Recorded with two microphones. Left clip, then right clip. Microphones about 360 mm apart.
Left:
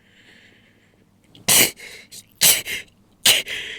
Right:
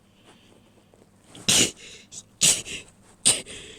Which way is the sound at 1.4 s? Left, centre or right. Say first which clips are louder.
Left 4 dB; centre.